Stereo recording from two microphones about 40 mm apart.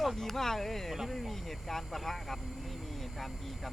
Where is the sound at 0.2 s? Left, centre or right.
Centre.